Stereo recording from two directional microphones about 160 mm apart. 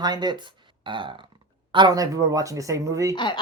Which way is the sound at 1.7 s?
25° right (ahead or behind).